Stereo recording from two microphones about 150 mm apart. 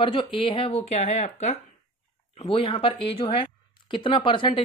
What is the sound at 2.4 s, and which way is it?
Speech, 35° left (ahead or behind).